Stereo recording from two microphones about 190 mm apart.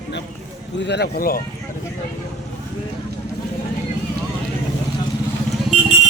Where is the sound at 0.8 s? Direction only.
60° left (ahead or behind).